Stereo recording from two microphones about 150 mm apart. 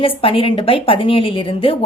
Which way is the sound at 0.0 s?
40° left (ahead or behind).